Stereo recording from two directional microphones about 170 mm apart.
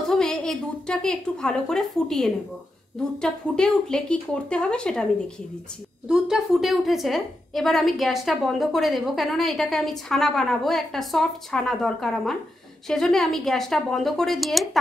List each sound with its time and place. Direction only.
0.1 s a woman's voice: 5° left (ahead or behind)
6.0 s a woman's voice: 5° right (ahead or behind)